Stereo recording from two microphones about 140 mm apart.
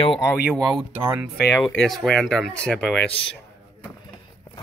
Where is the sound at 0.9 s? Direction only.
15° right (ahead or behind).